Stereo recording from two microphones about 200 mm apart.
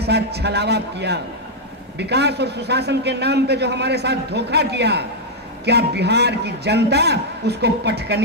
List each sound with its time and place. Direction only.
0.0 s a man's voice: 55° right (ahead or behind)